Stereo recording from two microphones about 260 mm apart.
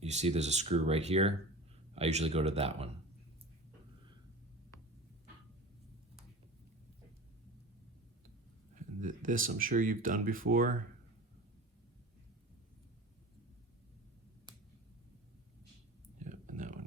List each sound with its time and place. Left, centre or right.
0.0 s speech: right
8.7 s speech: right
16.1 s a sound: right